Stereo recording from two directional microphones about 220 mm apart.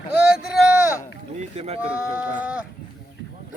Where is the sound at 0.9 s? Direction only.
15° left (ahead or behind).